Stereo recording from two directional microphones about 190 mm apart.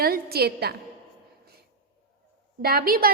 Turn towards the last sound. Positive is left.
turn(degrees=-50)  # may be behind; listen again after turning